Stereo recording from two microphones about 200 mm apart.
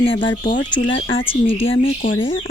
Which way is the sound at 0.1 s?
70° left (ahead or behind).